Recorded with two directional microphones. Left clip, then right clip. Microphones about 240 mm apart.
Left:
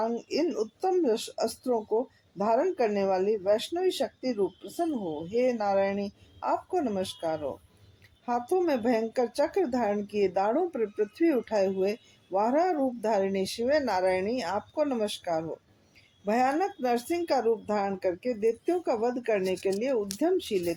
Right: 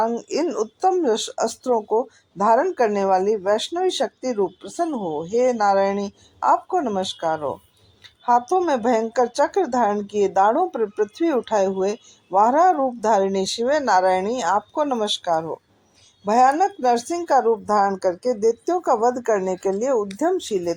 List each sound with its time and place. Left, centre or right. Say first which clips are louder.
0.0 s speech: right 7 dB; centre